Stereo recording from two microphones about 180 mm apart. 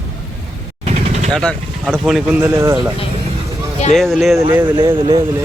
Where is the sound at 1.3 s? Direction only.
5° left (ahead or behind); by 2.9 s 15° right (ahead or behind).